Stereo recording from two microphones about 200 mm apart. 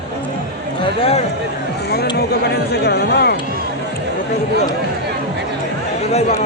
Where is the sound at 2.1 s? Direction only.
55° left (ahead or behind).